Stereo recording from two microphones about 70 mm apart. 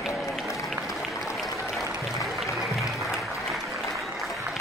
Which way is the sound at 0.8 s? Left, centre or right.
Centre.